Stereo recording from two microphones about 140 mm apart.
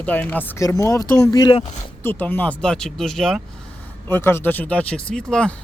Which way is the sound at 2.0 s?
15° left (ahead or behind).